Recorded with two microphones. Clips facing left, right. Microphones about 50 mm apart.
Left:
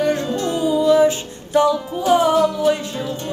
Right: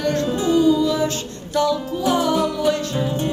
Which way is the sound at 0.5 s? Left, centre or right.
Centre.